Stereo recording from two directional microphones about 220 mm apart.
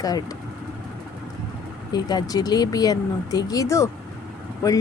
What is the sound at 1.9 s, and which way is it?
Speech, 20° left (ahead or behind).